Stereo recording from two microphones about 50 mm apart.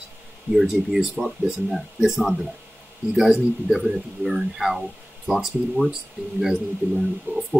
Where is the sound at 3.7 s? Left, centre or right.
Centre.